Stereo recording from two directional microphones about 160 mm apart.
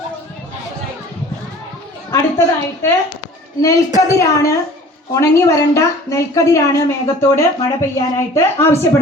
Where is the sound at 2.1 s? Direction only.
15° left (ahead or behind).